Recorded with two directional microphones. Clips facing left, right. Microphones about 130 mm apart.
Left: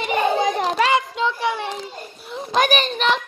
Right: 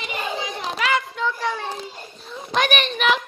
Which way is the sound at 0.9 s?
20° left (ahead or behind).